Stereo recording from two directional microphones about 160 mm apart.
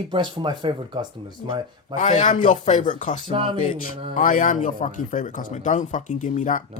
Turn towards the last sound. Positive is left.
turn(degrees=50)  # may be behind; listen again after turning